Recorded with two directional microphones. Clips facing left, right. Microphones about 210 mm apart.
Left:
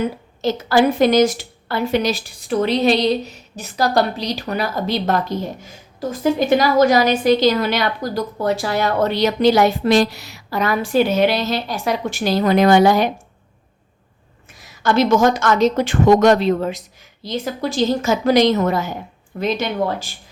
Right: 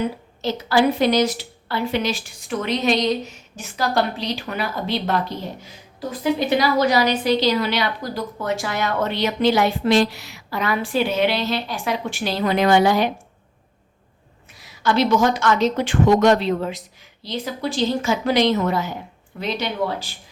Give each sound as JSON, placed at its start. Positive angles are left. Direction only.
{"t": 0.4, "sound": "a woman's voice", "side_deg": 45}
{"t": 14.6, "sound": "a woman's voice", "side_deg": 45}